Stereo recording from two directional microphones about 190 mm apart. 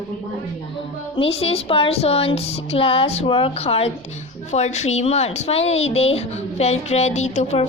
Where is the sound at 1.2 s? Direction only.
30° left (ahead or behind).